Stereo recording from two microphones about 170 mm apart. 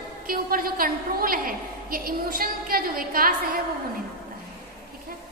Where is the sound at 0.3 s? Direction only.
55° right (ahead or behind).